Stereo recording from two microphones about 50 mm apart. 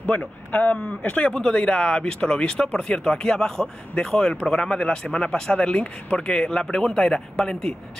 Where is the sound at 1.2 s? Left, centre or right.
Centre.